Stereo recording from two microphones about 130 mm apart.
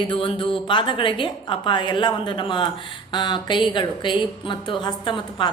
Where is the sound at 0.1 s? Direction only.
40° left (ahead or behind).